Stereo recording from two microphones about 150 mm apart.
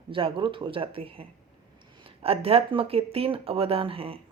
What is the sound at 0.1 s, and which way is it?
Speech, 35° right (ahead or behind).